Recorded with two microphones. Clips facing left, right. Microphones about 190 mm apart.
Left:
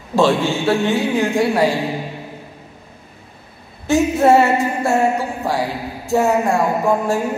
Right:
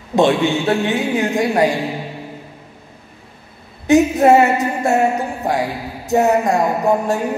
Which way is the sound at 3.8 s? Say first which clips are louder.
Right 2 dB; 20° right (ahead or behind).